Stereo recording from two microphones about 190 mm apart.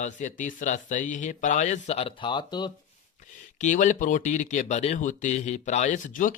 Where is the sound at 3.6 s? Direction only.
40° left (ahead or behind).